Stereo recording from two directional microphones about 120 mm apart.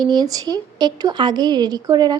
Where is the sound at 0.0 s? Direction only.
35° right (ahead or behind).